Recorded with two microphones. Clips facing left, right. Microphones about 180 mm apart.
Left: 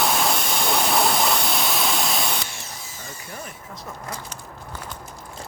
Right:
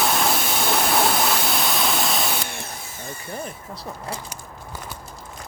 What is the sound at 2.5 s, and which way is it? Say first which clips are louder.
Drill: right 4 dB; 55° right (ahead or behind).